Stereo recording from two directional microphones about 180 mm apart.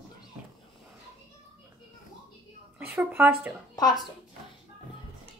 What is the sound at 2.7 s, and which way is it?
Speech, 10° right (ahead or behind).